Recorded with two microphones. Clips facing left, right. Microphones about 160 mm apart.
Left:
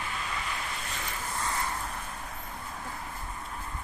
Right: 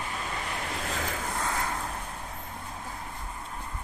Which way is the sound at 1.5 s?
50° right (ahead or behind).